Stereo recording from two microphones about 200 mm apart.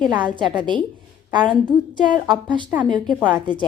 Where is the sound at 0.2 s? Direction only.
25° right (ahead or behind).